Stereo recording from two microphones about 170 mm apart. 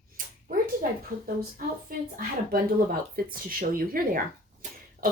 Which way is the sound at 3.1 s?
60° right (ahead or behind).